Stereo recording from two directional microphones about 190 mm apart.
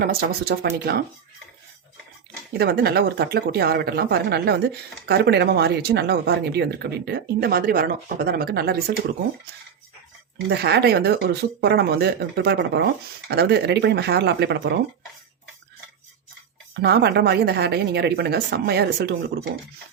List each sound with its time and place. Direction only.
0.0 s speech: 55° right (ahead or behind)
2.5 s speech: 55° right (ahead or behind)
10.5 s speech: 60° right (ahead or behind)
16.8 s speech: 60° right (ahead or behind)